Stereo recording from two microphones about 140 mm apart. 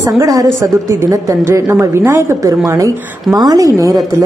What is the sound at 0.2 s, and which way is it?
A woman's voice, 25° right (ahead or behind).